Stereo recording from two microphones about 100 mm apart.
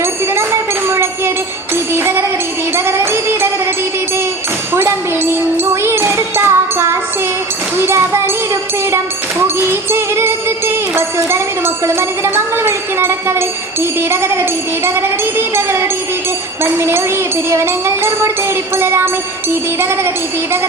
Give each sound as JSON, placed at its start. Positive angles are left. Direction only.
{"t": 0.0, "sound": "jingle bell", "side_deg": -25}
{"t": 1.7, "sound": "music", "side_deg": -25}
{"t": 4.7, "sound": "tambourine", "side_deg": -25}
{"t": 5.8, "sound": "music", "side_deg": -25}
{"t": 7.8, "sound": "child singing", "side_deg": -25}
{"t": 9.9, "sound": "music", "side_deg": -25}
{"t": 10.9, "sound": "a sound", "side_deg": -25}
{"t": 14.1, "sound": "music", "side_deg": -25}
{"t": 16.7, "sound": "speech", "side_deg": -25}
{"t": 17.5, "sound": "music", "side_deg": -25}